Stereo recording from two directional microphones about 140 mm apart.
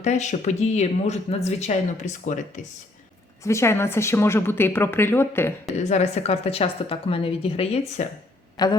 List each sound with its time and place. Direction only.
0.0 s a woman's voice: 55° left (ahead or behind)
3.4 s a woman's voice: 20° left (ahead or behind)
5.9 s a woman's voice: 50° left (ahead or behind)
8.6 s a woman's voice: 30° left (ahead or behind)